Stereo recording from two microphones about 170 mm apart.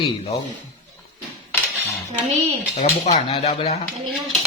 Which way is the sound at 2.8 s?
45° left (ahead or behind).